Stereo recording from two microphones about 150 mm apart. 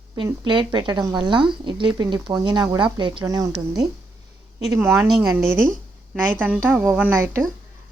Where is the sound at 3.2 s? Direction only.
20° right (ahead or behind).